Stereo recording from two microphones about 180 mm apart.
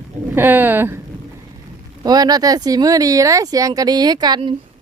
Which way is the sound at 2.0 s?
20° right (ahead or behind).